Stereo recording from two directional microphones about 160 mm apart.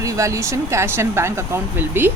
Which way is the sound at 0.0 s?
20° right (ahead or behind).